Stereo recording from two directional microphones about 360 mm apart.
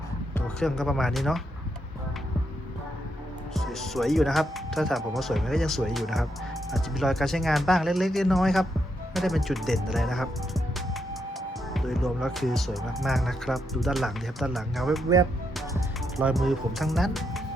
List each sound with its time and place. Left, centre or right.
0.3 s speech: centre
3.5 s speech: centre